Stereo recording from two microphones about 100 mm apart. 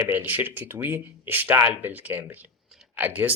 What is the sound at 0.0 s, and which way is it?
Speech, 20° right (ahead or behind).